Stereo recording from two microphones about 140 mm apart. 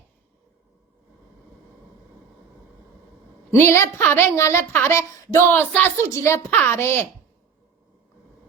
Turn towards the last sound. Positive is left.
turn(degrees=15)  # may be behind; listen again after turning